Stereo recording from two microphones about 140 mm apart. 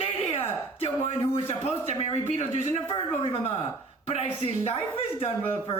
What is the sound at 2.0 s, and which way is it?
Speech, 40° left (ahead or behind).